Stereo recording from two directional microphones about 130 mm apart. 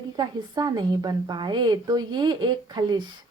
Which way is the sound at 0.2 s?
30° right (ahead or behind).